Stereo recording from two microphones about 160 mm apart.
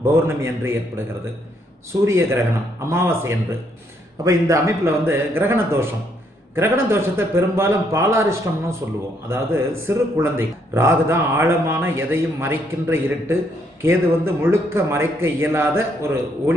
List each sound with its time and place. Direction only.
0.0 s a man's voice: 15° right (ahead or behind)
2.0 s a man's voice: 15° right (ahead or behind)